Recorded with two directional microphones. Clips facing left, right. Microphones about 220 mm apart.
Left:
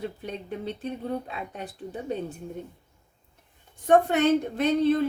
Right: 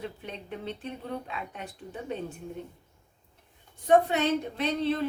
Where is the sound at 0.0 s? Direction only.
40° left (ahead or behind).